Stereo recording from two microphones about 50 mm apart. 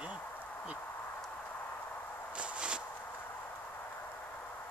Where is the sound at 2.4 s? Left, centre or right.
Centre.